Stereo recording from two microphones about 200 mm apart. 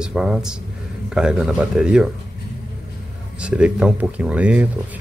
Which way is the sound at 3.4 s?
5° right (ahead or behind).